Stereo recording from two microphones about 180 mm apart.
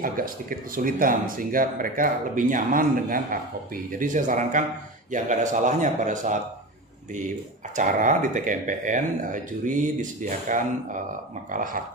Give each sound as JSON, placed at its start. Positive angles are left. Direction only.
{"t": 0.0, "sound": "speech", "side_deg": -50}